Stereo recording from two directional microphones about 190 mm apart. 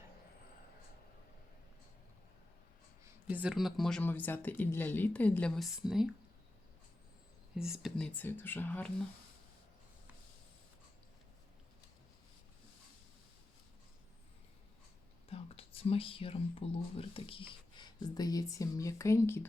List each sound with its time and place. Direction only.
3.0 s speech: 10° right (ahead or behind)
7.5 s speech: 5° right (ahead or behind)
15.3 s speech: 30° left (ahead or behind); by 19.5 s 15° left (ahead or behind)